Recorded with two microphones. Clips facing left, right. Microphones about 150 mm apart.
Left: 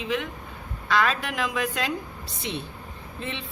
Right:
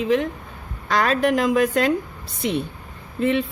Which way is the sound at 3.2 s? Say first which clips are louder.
Right 15 dB; 55° right (ahead or behind).